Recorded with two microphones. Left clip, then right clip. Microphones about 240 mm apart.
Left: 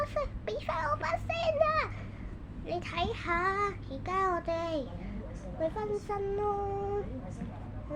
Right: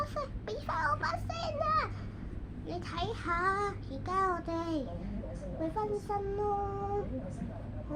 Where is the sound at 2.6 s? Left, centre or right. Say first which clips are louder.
Left 4 dB; left.